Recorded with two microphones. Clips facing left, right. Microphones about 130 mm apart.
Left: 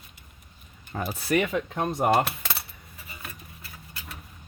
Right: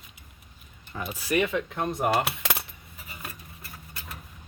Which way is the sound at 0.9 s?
45° left (ahead or behind).